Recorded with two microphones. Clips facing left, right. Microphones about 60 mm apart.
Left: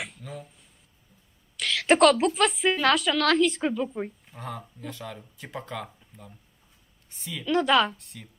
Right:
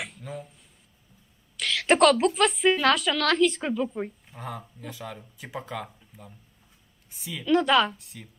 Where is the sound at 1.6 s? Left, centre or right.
Centre.